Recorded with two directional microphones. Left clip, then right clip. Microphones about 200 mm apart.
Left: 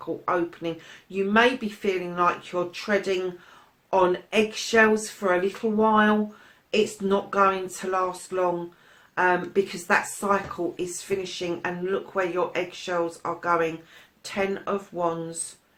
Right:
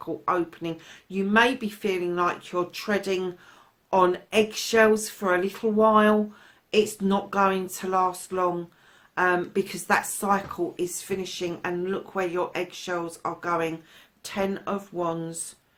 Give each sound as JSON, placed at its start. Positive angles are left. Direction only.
{"t": 0.3, "sound": "speech", "side_deg": -45}